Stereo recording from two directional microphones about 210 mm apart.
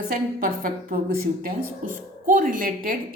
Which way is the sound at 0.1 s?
45° right (ahead or behind).